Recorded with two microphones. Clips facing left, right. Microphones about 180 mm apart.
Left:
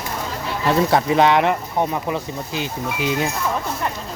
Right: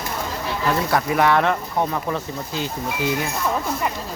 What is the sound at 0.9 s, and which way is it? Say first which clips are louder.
Speech: left 2 dB; 20° left (ahead or behind).